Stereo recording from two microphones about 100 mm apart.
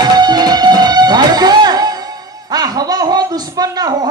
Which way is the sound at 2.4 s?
40° right (ahead or behind).